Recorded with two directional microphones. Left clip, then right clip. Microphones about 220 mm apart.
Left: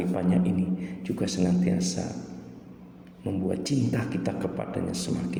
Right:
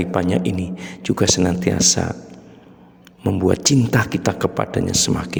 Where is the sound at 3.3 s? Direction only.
50° right (ahead or behind).